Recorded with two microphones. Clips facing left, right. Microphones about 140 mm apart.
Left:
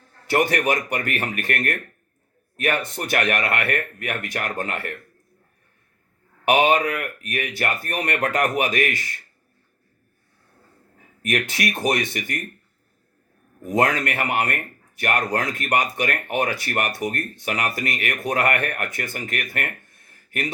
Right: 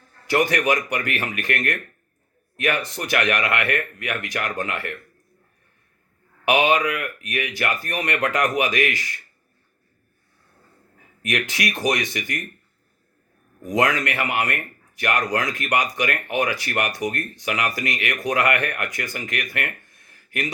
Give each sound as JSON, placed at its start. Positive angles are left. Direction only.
{"t": 0.5, "sound": "speech", "side_deg": 50}
{"t": 6.4, "sound": "speech", "side_deg": 50}
{"t": 11.2, "sound": "speech", "side_deg": 50}
{"t": 14.0, "sound": "speech", "side_deg": 50}